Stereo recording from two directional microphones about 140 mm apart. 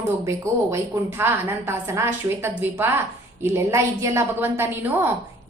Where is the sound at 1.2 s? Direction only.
15° right (ahead or behind).